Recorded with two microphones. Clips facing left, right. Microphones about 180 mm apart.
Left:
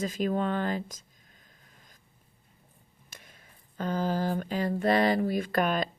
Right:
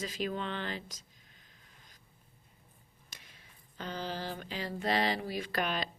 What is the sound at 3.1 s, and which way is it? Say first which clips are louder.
Speech: left 4 dB; 50° left (ahead or behind).